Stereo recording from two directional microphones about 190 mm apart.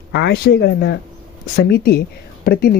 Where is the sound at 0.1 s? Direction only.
60° left (ahead or behind).